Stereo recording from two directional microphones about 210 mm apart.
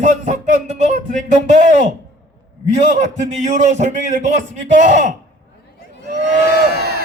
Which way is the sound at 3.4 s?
35° right (ahead or behind).